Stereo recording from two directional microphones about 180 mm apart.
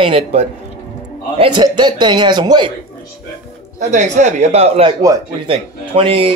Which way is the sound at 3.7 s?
45° right (ahead or behind).